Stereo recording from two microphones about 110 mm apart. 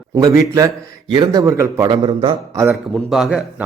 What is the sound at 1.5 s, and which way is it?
Speech, 25° right (ahead or behind).